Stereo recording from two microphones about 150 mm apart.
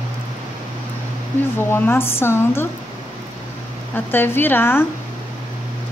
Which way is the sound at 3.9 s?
15° left (ahead or behind).